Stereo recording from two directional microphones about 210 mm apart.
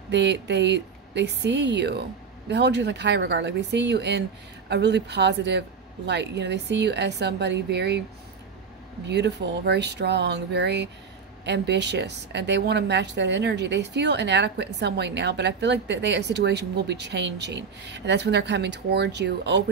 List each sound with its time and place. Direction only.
0.1 s a woman's voice: 55° right (ahead or behind)
9.0 s a woman's voice: 55° right (ahead or behind)